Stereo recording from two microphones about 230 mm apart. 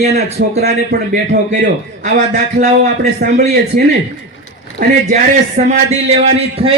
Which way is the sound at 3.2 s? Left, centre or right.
Right.